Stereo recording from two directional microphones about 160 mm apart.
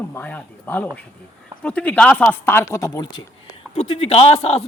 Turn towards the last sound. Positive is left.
turn(degrees=40)  # may be behind; listen again after turning